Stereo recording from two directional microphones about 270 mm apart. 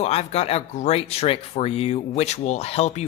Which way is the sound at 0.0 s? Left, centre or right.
Left.